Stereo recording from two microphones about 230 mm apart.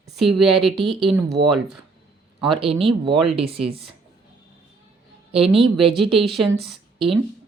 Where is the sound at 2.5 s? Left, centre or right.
Right.